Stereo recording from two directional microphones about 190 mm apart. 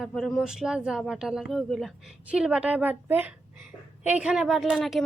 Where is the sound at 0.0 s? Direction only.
Centre (ahead or behind).